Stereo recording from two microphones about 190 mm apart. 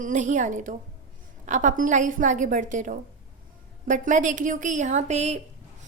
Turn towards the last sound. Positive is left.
turn(degrees=-35)  # may be behind; listen again after turning